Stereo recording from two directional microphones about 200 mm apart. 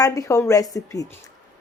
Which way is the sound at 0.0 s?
15° left (ahead or behind).